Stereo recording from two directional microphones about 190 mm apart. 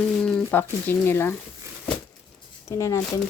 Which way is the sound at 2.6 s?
15° left (ahead or behind).